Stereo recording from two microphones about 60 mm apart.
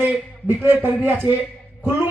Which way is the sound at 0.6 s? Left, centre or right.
Right.